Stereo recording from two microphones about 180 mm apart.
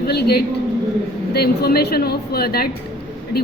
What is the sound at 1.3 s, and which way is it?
A woman's voice, 60° left (ahead or behind).